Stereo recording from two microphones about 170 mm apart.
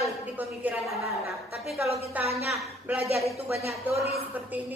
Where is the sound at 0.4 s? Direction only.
10° right (ahead or behind).